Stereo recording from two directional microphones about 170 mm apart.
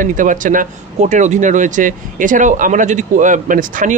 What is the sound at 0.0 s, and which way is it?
Speech, 50° right (ahead or behind).